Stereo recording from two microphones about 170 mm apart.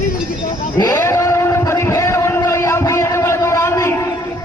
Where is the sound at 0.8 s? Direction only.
15° left (ahead or behind).